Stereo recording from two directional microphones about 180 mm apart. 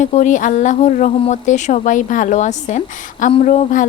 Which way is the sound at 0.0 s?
40° left (ahead or behind).